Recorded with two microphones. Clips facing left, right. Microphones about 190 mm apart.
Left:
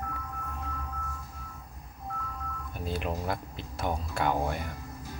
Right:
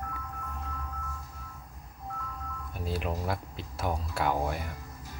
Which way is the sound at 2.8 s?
5° right (ahead or behind).